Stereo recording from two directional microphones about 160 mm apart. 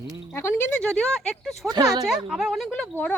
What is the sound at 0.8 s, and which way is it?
Speech, 5° left (ahead or behind).